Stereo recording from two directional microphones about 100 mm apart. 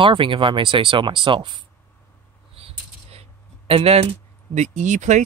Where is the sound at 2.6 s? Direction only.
75° right (ahead or behind).